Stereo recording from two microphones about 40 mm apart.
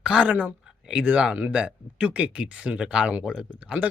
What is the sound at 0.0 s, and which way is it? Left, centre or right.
Speech, right.